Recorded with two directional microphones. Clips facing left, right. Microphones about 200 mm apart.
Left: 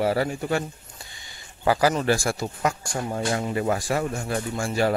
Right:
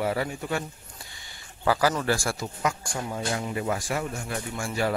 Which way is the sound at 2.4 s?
45° left (ahead or behind).